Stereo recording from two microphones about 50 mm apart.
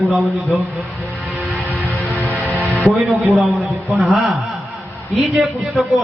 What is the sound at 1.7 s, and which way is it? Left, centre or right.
Music, left.